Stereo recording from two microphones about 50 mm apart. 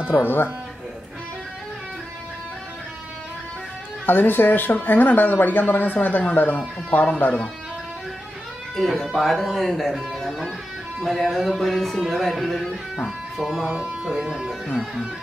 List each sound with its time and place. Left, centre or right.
4.0 s speech: left
8.7 s speech: centre
12.6 s music: centre
13.4 s speech: centre
14.0 s speech: centre